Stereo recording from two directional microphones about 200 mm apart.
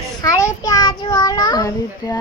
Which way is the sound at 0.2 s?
15° left (ahead or behind).